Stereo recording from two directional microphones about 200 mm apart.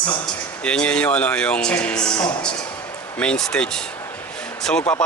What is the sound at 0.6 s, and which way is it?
Speech, 5° left (ahead or behind).